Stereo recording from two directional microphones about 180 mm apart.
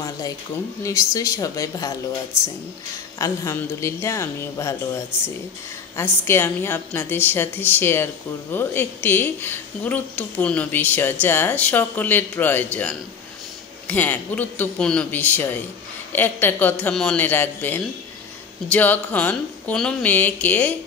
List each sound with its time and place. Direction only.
0.8 s a woman's voice: 15° left (ahead or behind)
3.2 s a woman's voice: 15° left (ahead or behind)
13.8 s a woman's voice: 10° left (ahead or behind)